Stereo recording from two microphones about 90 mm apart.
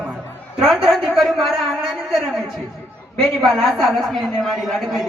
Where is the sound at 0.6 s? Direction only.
Centre (ahead or behind).